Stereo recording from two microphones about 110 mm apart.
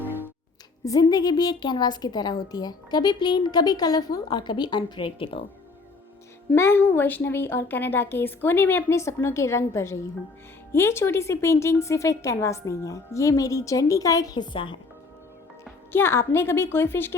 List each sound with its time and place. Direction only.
0.0 s music: 20° right (ahead or behind)
0.9 s a woman's voice: 35° left (ahead or behind); by 5.4 s 55° left (ahead or behind)
6.5 s a woman's voice: 20° left (ahead or behind); by 14.8 s 50° left (ahead or behind)
15.9 s a woman's voice: 20° left (ahead or behind)